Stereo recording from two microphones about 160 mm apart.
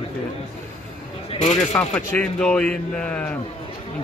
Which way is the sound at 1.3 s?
45° left (ahead or behind).